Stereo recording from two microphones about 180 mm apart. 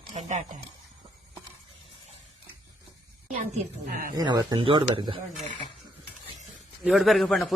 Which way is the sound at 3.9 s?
55° right (ahead or behind).